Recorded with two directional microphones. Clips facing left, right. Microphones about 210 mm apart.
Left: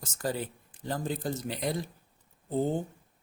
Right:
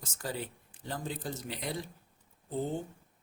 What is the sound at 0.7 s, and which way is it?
Speech, 45° left (ahead or behind).